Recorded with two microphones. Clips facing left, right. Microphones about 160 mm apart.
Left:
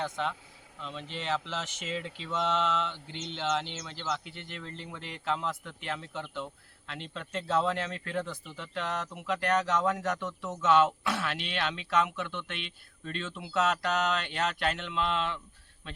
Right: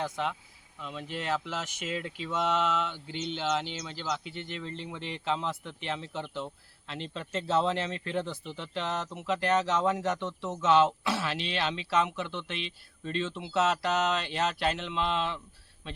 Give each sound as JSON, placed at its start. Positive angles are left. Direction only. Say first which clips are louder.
{"t": 0.0, "sound": "speech", "louder": "right 1 dB", "side_deg": -5}
{"t": 4.9, "sound": "speech", "louder": "right 1 dB", "side_deg": -30}